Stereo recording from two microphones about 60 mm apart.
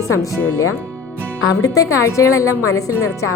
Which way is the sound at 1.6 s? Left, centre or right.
Left.